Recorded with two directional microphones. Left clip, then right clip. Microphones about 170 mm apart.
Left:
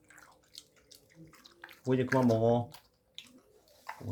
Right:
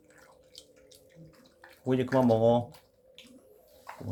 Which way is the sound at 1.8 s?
15° right (ahead or behind).